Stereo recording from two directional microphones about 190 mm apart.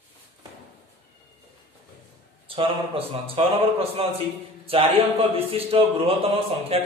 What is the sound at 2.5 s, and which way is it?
A man's voice, 30° right (ahead or behind).